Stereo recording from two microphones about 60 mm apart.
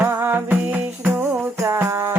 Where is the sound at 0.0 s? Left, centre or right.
Right.